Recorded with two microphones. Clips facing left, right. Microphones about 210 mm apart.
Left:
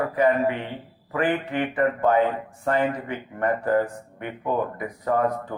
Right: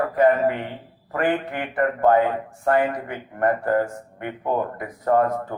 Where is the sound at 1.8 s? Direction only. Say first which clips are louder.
Right 3 dB; 45° right (ahead or behind).